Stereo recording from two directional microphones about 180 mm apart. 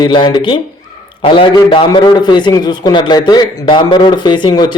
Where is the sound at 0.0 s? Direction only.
25° left (ahead or behind).